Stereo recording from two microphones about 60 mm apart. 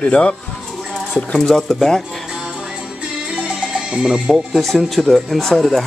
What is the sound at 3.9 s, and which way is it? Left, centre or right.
Speech, centre.